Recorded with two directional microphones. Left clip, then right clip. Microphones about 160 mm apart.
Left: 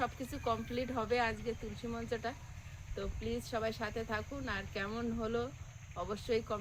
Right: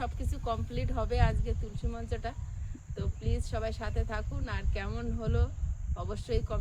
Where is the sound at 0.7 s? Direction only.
45° right (ahead or behind).